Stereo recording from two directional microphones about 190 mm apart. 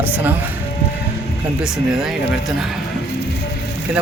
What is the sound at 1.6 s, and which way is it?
Speech, 5° right (ahead or behind).